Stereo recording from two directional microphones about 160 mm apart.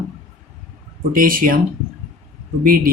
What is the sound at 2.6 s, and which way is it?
Speech, 65° right (ahead or behind).